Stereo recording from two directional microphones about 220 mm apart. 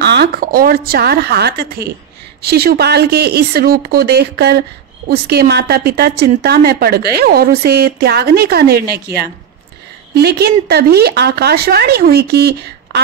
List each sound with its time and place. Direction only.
0.0 s speech: 50° right (ahead or behind)
10.1 s speech: 45° right (ahead or behind)